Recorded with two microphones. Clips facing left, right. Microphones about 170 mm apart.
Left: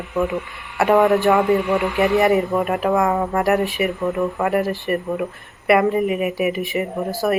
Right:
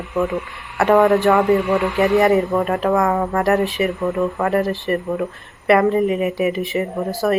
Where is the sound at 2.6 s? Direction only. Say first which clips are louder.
Right 1 dB; 15° left (ahead or behind).